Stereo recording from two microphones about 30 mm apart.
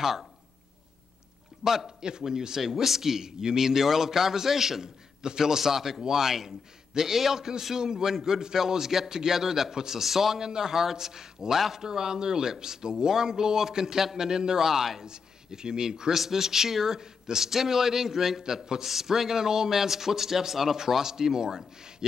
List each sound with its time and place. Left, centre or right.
1.6 s a man's voice: centre
5.2 s a man's voice: right
15.0 s a man's voice: right